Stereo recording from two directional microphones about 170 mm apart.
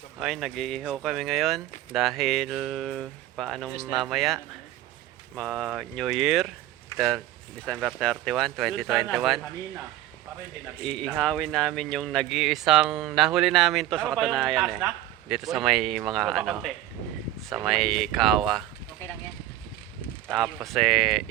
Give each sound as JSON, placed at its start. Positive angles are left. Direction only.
{"t": 0.2, "sound": "speech", "side_deg": 0}
{"t": 5.4, "sound": "speech", "side_deg": 0}
{"t": 10.8, "sound": "speech", "side_deg": 5}
{"t": 20.2, "sound": "speech", "side_deg": 0}